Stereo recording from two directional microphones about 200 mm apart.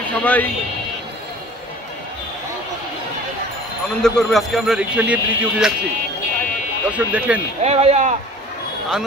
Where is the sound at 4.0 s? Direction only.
5° left (ahead or behind).